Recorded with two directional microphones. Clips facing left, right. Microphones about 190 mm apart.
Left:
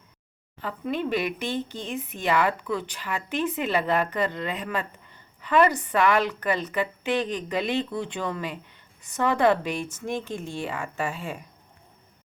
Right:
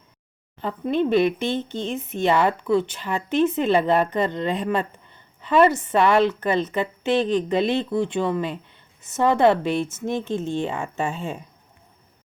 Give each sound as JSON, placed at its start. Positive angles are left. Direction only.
{"t": 0.6, "sound": "speech", "side_deg": -25}